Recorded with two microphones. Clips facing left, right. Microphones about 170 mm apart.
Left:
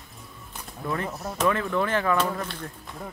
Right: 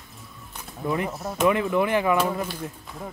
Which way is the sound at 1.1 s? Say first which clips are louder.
Right 3 dB; centre (ahead or behind).